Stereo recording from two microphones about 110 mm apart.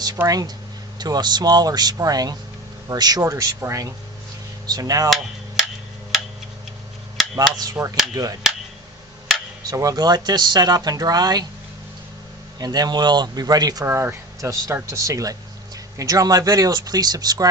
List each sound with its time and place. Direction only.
0.3 s speech: 35° right (ahead or behind)
7.3 s speech: 35° right (ahead or behind)
9.6 s speech: 35° right (ahead or behind)
12.5 s speech: 35° right (ahead or behind)
13.8 s speech: 25° right (ahead or behind)